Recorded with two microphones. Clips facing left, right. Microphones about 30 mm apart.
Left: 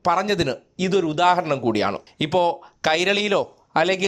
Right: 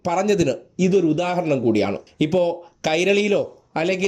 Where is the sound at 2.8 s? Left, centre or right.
Left.